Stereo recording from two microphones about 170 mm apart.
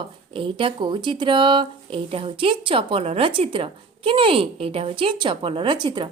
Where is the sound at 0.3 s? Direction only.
30° right (ahead or behind).